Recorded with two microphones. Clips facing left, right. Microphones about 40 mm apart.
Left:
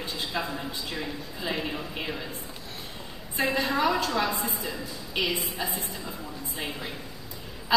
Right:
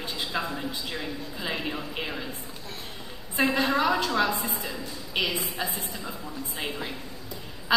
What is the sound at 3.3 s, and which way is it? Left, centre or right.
A woman's voice, right.